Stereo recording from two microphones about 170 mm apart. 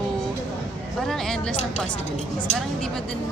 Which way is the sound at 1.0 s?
5° left (ahead or behind).